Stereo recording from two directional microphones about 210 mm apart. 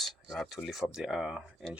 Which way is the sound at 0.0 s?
Centre (ahead or behind).